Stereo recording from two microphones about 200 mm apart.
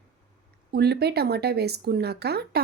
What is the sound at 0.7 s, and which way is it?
Speech, 55° right (ahead or behind).